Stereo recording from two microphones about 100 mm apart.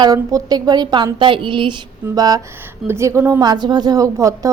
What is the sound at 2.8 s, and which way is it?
Speech, 25° right (ahead or behind).